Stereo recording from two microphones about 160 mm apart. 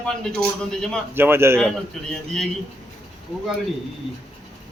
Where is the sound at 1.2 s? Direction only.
15° right (ahead or behind).